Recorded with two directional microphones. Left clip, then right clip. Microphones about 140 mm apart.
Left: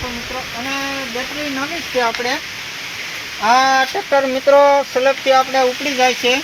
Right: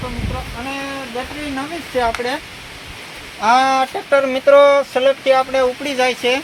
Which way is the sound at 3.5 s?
15° left (ahead or behind).